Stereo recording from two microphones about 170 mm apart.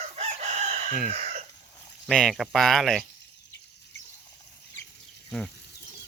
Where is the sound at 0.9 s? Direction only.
45° right (ahead or behind).